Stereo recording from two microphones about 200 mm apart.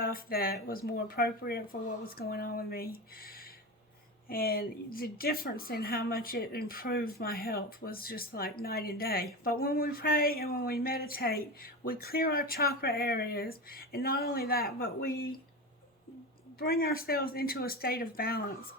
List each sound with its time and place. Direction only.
0.0 s speech: 50° left (ahead or behind)
16.6 s speech: 50° left (ahead or behind)